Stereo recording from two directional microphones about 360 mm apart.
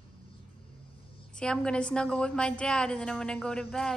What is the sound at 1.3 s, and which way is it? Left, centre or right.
A woman's voice, centre.